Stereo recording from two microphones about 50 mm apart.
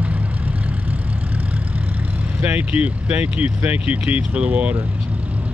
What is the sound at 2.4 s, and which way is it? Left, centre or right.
Speech, right.